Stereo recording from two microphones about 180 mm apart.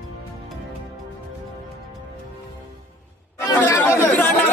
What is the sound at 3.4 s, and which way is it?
Chatter, 20° left (ahead or behind).